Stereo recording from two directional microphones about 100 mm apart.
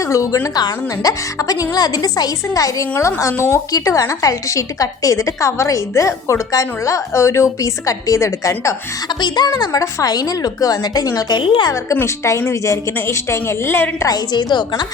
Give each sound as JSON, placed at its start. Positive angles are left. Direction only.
{"t": 0.0, "sound": "a woman's voice", "side_deg": 30}
{"t": 9.0, "sound": "a woman's voice", "side_deg": 45}
{"t": 11.3, "sound": "a woman's voice", "side_deg": 55}
{"t": 11.9, "sound": "a woman's voice", "side_deg": 30}
{"t": 14.1, "sound": "a woman's voice", "side_deg": 45}